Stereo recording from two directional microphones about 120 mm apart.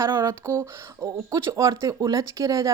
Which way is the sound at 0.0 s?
20° right (ahead or behind).